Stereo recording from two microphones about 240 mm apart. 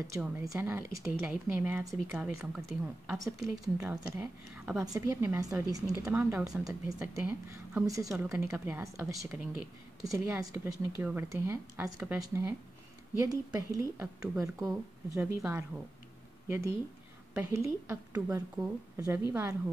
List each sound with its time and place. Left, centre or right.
0.0 s a woman's voice: centre
16.4 s a woman's voice: centre